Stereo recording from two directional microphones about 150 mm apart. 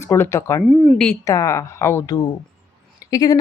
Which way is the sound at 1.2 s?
20° left (ahead or behind).